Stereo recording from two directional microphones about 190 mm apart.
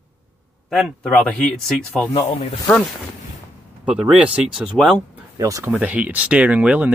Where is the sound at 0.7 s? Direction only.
Centre (ahead or behind).